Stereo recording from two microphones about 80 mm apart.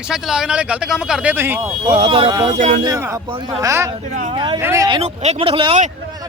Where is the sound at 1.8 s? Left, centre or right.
Right.